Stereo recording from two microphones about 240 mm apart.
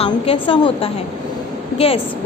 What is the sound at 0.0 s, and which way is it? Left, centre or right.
A woman's voice, left.